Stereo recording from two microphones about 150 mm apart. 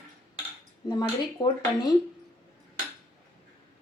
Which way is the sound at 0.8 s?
25° left (ahead or behind).